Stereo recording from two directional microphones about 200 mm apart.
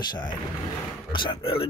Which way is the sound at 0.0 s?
20° left (ahead or behind).